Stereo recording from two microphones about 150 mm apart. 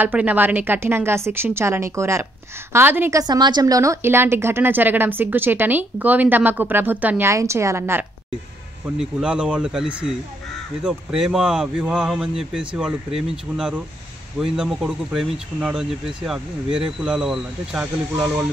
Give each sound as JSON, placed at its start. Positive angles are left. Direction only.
{"t": 0.0, "sound": "a woman's voice", "side_deg": -10}
{"t": 8.9, "sound": "speech", "side_deg": -5}